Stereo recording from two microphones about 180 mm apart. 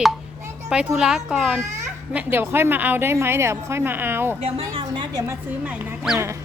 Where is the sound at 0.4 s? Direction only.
5° right (ahead or behind).